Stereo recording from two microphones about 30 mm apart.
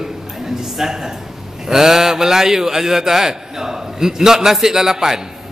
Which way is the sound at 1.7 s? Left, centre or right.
Centre.